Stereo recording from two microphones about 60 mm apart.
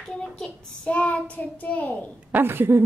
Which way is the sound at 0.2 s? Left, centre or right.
Centre.